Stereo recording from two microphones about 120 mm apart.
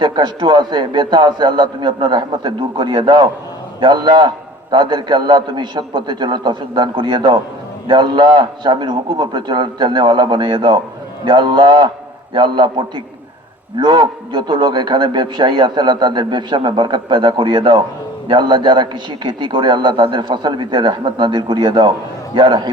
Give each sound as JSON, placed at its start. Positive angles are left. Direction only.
{"t": 0.0, "sound": "a man's voice", "side_deg": -40}